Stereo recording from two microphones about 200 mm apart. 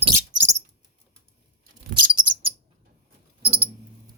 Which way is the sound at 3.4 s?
30° right (ahead or behind).